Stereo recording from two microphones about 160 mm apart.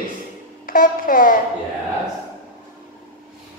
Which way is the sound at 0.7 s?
60° left (ahead or behind).